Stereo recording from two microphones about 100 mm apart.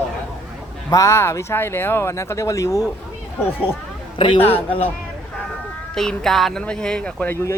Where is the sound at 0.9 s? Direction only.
30° left (ahead or behind).